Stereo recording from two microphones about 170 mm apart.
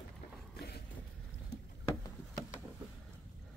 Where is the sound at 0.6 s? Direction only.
70° left (ahead or behind).